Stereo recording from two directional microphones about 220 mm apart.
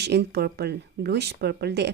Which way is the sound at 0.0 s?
50° right (ahead or behind).